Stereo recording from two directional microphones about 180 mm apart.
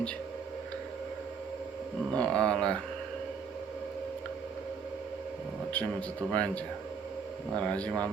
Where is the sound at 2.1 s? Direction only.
5° left (ahead or behind).